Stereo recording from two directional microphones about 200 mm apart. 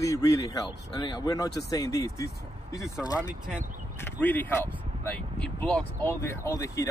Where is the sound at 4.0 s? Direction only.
10° left (ahead or behind).